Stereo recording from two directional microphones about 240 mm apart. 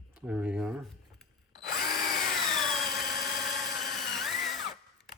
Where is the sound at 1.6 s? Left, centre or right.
Left.